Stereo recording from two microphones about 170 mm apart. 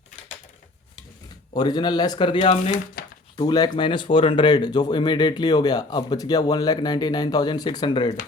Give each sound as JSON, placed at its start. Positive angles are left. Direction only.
{"t": 1.5, "sound": "speech", "side_deg": 25}